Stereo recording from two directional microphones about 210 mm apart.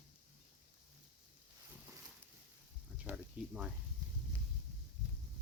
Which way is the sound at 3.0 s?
5° right (ahead or behind).